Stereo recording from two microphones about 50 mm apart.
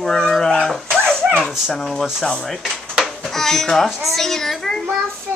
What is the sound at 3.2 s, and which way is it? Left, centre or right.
Dishes, centre.